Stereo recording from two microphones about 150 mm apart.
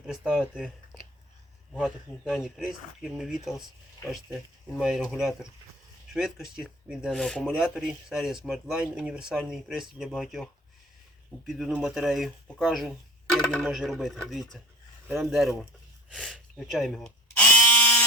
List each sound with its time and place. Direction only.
0.0 s speech: 5° right (ahead or behind)
1.7 s speech: centre (ahead or behind)
4.8 s speech: 5° right (ahead or behind)
6.1 s speech: 5° right (ahead or behind)
16.0 s electric toothbrush: centre (ahead or behind)